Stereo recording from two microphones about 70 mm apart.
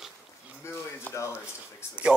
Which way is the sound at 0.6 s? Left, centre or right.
Left.